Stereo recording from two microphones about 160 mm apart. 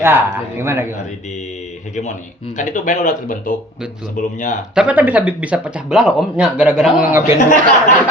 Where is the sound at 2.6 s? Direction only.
55° left (ahead or behind).